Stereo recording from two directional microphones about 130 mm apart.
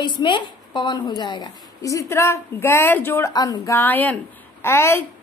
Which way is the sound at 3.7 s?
15° left (ahead or behind).